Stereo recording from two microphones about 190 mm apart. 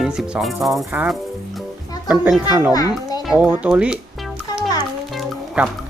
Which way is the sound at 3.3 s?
5° right (ahead or behind).